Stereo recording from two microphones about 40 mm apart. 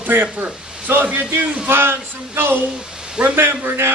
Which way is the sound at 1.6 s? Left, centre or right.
Right.